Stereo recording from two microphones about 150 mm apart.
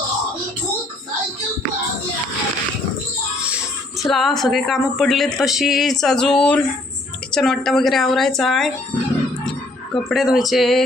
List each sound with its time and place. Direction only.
4.0 s speech: centre (ahead or behind)